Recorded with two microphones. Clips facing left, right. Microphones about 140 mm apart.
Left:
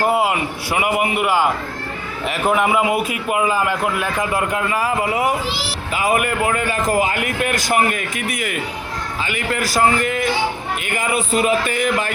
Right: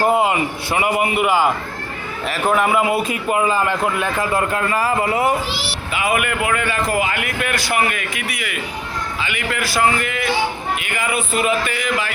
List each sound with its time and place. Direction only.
0.0 s a man's voice: 5° left (ahead or behind)
1.2 s speech: 10° right (ahead or behind)
2.5 s a man's voice: 15° left (ahead or behind)
6.0 s a man's voice: 40° left (ahead or behind)